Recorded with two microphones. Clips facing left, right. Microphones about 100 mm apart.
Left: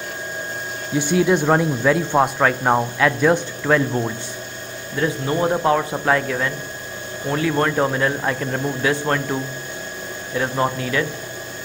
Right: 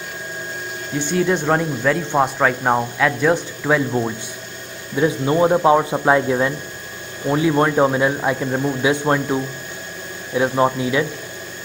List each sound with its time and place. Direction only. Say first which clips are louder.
0.9 s speech: left 2 dB; 5° left (ahead or behind)
4.9 s a man's voice: right 4 dB; 20° right (ahead or behind)